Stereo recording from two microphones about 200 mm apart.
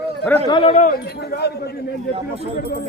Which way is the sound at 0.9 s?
50° left (ahead or behind).